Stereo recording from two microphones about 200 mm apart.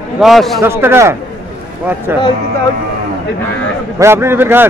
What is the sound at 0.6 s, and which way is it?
Speech, 10° right (ahead or behind).